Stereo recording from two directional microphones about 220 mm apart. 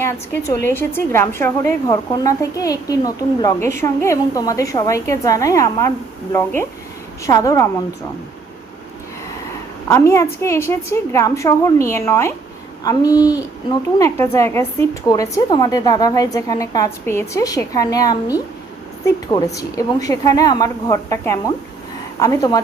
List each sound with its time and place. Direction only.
0.0 s a woman's voice: 10° left (ahead or behind)
9.9 s a woman's voice: 10° left (ahead or behind)